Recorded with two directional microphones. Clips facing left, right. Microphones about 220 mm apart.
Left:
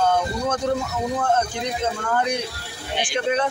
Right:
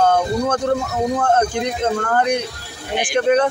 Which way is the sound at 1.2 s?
55° right (ahead or behind).